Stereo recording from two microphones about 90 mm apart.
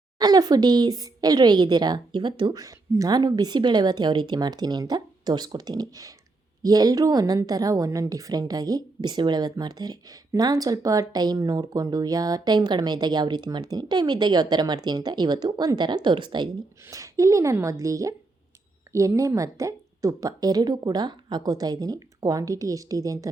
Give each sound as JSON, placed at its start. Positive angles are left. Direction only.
{"t": 0.2, "sound": "a woman's voice", "side_deg": -50}
{"t": 2.6, "sound": "a woman's voice", "side_deg": -40}
{"t": 16.8, "sound": "a woman's voice", "side_deg": -35}